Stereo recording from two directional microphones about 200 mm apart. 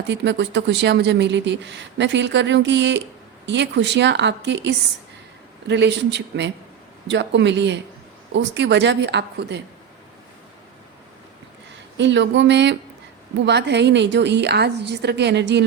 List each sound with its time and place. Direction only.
0.1 s speech: 60° right (ahead or behind)
11.9 s speech: 65° right (ahead or behind)